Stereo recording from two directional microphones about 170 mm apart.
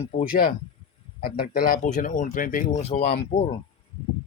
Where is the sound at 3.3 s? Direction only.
35° left (ahead or behind).